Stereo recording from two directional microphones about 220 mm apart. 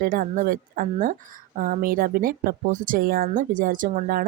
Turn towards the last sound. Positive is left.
turn(degrees=-40)  # may be behind; listen again after turning